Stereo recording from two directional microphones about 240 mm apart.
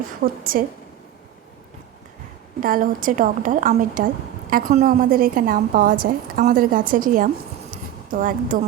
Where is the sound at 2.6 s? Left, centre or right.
Right.